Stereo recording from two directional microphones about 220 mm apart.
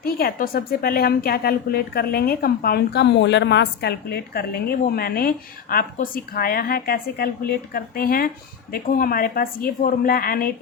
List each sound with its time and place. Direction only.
0.0 s a woman's voice: 45° left (ahead or behind)